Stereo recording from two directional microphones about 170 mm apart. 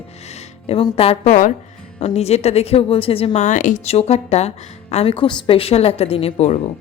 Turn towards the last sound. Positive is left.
turn(degrees=40)  # may be behind; listen again after turning